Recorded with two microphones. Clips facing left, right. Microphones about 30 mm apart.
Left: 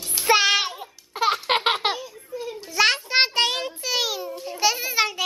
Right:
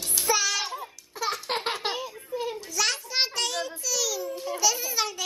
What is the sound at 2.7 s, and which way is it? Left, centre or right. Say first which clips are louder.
Child singing: left 9 dB; left.